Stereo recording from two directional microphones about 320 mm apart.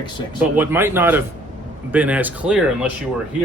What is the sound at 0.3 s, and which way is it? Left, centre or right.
Speech, centre.